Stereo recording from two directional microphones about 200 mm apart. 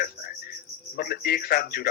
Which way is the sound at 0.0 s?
45° left (ahead or behind).